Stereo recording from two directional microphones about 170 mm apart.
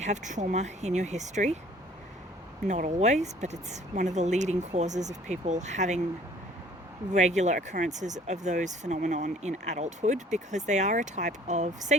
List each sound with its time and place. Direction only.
0.0 s speech: 45° right (ahead or behind)
2.6 s speech: 45° right (ahead or behind)
7.1 s speech: 45° right (ahead or behind)